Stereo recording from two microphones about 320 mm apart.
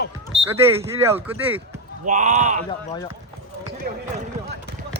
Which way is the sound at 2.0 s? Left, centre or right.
Right.